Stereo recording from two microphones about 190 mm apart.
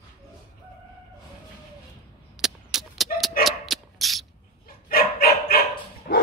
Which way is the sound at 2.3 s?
Centre (ahead or behind).